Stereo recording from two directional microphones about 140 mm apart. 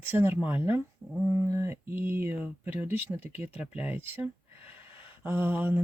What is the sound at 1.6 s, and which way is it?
Speech, 15° right (ahead or behind).